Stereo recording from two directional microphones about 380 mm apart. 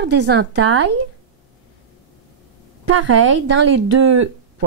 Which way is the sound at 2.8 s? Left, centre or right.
Right.